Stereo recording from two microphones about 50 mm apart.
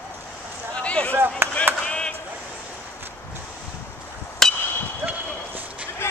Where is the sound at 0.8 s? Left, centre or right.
Left.